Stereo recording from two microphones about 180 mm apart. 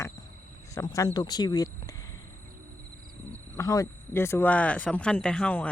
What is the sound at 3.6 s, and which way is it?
Speech, 15° left (ahead or behind).